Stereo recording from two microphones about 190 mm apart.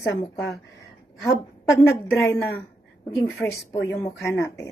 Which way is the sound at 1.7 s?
15° left (ahead or behind).